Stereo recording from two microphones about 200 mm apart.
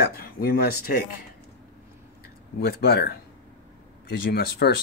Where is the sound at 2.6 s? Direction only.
50° left (ahead or behind).